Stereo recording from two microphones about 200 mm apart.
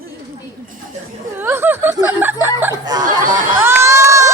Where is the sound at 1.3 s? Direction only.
10° right (ahead or behind).